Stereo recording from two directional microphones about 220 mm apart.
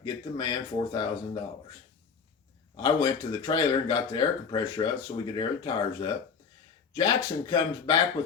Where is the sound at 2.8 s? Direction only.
20° left (ahead or behind).